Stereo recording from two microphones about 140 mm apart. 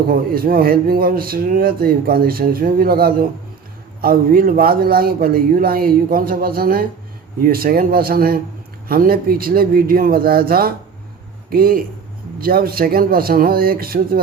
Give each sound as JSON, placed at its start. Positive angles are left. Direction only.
{"t": 0.1, "sound": "speech", "side_deg": -90}